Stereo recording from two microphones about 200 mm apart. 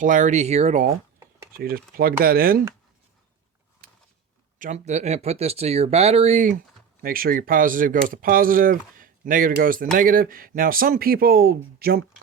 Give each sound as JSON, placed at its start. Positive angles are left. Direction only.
{"t": 0.0, "sound": "speech", "side_deg": -40}
{"t": 1.5, "sound": "speech", "side_deg": -45}
{"t": 3.8, "sound": "a sound", "side_deg": -45}
{"t": 4.5, "sound": "speech", "side_deg": -40}